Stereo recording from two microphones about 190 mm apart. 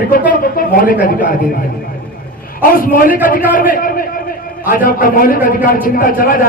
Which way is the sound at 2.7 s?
50° left (ahead or behind).